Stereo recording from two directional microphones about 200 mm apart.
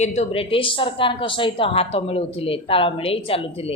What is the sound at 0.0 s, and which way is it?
Speech, 35° left (ahead or behind).